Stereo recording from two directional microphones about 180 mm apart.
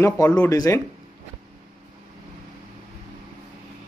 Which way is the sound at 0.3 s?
15° left (ahead or behind).